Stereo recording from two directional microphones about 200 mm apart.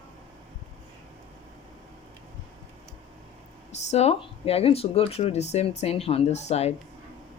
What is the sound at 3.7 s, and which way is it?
Speech, 35° left (ahead or behind).